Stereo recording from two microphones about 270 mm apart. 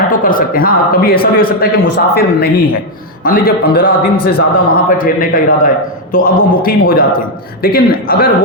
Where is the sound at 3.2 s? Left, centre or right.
Left.